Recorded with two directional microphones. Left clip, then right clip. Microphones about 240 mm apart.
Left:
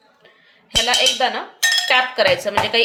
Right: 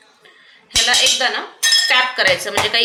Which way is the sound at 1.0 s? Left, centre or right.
Left.